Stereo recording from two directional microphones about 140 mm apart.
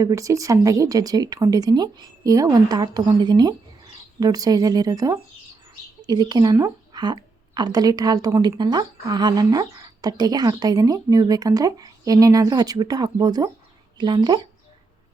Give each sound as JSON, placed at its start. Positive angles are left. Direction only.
{"t": 0.0, "sound": "speech", "side_deg": -25}